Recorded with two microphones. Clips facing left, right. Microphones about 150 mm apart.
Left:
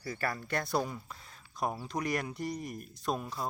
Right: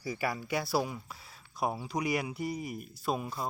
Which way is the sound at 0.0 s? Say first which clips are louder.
Right 2 dB; 10° right (ahead or behind).